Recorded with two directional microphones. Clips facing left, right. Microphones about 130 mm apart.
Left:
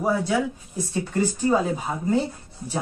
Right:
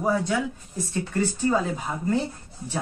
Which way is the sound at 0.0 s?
5° left (ahead or behind).